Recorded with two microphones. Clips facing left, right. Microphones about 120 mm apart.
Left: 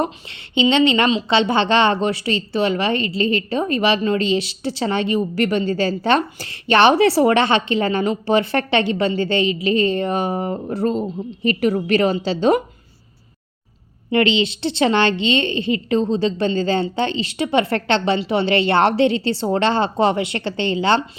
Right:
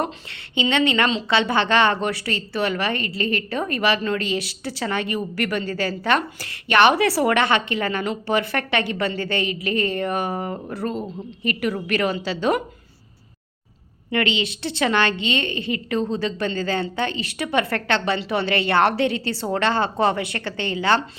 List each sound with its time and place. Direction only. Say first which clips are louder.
0.0 s a woman's voice: left 3 dB; 20° left (ahead or behind)
14.1 s a woman's voice: left 6 dB; 25° left (ahead or behind)